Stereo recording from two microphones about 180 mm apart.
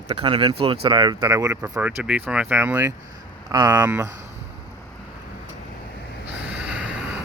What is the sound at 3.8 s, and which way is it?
Speech, 10° right (ahead or behind).